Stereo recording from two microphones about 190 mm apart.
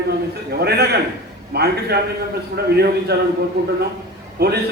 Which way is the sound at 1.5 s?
55° right (ahead or behind).